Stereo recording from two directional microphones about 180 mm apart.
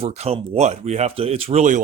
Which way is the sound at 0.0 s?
35° right (ahead or behind).